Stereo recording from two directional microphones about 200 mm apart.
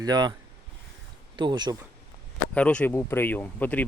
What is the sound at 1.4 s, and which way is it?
Speech, 20° right (ahead or behind).